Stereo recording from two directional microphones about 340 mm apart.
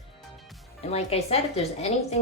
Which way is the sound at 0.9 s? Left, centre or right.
Centre.